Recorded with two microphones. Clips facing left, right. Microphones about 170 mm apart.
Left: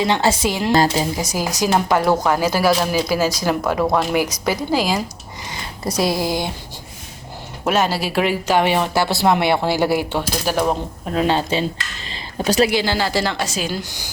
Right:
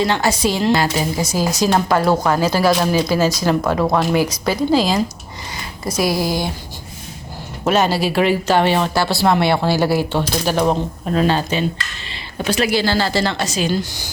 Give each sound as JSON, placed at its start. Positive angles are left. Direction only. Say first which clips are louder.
{"t": 0.2, "sound": "a woman's voice", "louder": "even", "side_deg": 30}
{"t": 0.5, "sound": "speech", "louder": "even", "side_deg": 15}
{"t": 6.0, "sound": "a woman's voice", "louder": "right 1 dB", "side_deg": 20}
{"t": 7.6, "sound": "speech", "louder": "right 3 dB", "side_deg": 5}
{"t": 12.5, "sound": "speech", "louder": "left 3 dB", "side_deg": 40}
{"t": 12.7, "sound": "speech", "louder": "right 2 dB", "side_deg": 15}